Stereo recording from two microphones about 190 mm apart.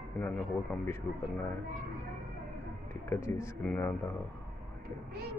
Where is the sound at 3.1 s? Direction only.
15° left (ahead or behind).